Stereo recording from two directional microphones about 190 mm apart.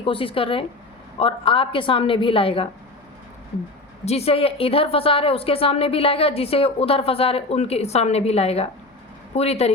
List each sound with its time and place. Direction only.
0.0 s a woman's voice: 30° left (ahead or behind)
4.0 s a woman's voice: 35° left (ahead or behind)